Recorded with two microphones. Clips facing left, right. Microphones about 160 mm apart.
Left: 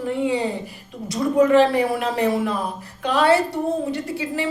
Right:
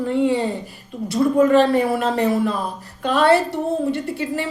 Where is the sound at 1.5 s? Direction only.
15° left (ahead or behind).